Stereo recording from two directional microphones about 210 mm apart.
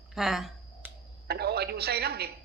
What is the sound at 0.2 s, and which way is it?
Speech, centre (ahead or behind).